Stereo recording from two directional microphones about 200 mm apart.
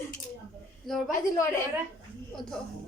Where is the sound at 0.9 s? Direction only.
Centre (ahead or behind).